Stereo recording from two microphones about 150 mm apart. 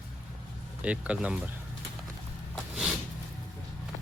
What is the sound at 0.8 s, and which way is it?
Speech, 10° right (ahead or behind).